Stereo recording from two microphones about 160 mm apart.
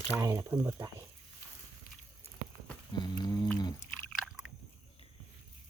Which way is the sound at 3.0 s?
25° left (ahead or behind).